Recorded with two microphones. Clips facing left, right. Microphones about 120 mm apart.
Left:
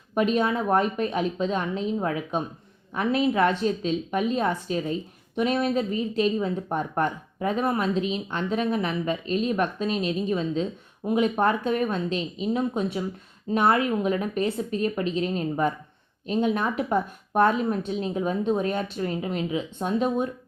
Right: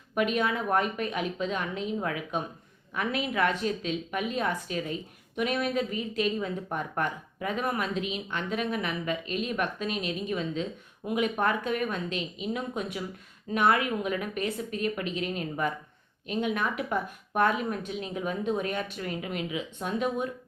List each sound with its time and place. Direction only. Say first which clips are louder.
0.1 s speech: left 4 dB; 30° left (ahead or behind)